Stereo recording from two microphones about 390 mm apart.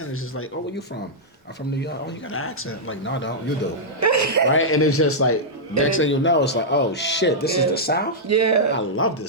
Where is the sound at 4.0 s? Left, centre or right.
Right.